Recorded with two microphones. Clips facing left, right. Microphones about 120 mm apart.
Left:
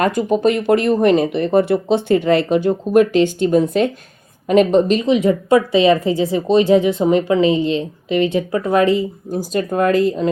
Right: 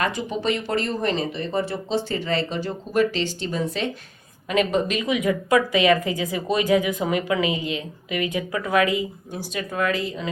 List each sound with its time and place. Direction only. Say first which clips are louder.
0.0 s speech: left 9 dB; 50° left (ahead or behind)
4.4 s a woman's voice: left 9 dB; 40° left (ahead or behind)